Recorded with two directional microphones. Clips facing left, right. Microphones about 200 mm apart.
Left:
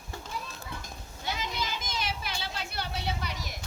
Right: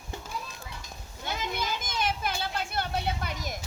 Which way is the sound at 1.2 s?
55° right (ahead or behind).